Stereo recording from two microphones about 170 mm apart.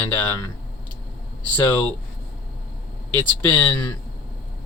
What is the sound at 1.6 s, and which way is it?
Speech, 20° left (ahead or behind).